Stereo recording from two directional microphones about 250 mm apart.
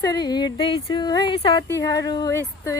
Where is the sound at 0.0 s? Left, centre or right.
Centre.